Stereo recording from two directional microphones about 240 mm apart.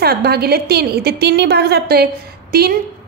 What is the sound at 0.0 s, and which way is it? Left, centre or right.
A woman's voice, right.